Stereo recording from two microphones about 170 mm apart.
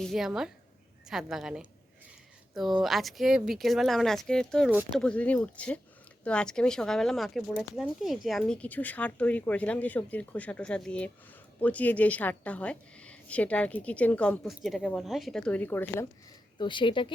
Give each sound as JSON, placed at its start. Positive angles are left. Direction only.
{"t": 0.0, "sound": "speech", "side_deg": 0}
{"t": 16.6, "sound": "speech", "side_deg": 30}